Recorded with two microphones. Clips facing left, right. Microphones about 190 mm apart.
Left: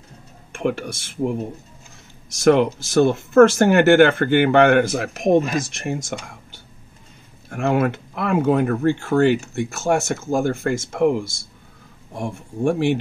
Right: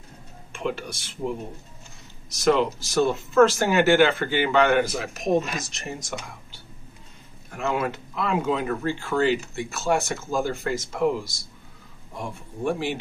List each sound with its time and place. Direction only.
0.5 s speech: 55° left (ahead or behind)
2.3 s speech: 60° left (ahead or behind)
7.5 s speech: 55° left (ahead or behind)
12.4 s speech: 55° left (ahead or behind)